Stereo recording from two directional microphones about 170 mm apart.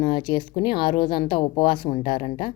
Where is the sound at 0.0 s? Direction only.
25° left (ahead or behind).